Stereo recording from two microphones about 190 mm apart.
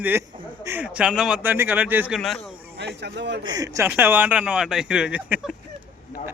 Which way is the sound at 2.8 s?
65° right (ahead or behind).